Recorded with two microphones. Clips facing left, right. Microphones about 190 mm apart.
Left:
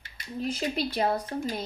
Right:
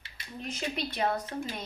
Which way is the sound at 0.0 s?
35° left (ahead or behind).